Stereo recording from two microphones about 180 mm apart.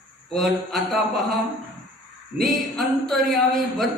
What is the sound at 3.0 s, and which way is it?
Speech, centre (ahead or behind).